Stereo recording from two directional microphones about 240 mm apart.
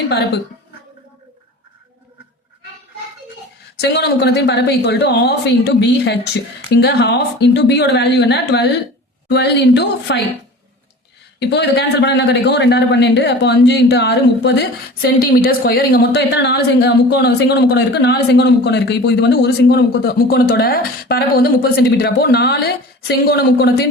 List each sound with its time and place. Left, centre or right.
3.8 s a man's voice: left
11.3 s a man's voice: left